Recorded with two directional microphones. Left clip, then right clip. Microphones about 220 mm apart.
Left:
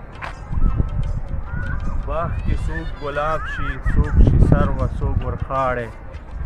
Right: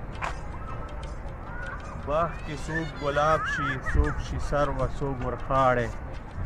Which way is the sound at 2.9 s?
Centre (ahead or behind).